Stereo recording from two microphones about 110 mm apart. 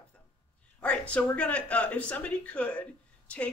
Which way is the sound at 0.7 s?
10° left (ahead or behind).